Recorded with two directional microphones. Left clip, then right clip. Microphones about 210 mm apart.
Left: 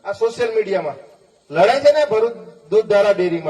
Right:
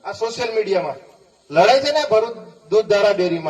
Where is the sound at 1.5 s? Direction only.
35° right (ahead or behind).